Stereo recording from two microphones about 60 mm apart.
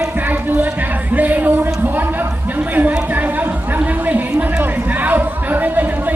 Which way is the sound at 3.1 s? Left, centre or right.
Right.